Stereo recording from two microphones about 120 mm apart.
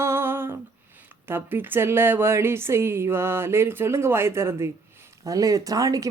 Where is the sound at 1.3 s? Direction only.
15° right (ahead or behind).